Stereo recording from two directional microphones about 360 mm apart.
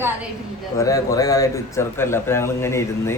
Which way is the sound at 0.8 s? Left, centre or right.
Centre.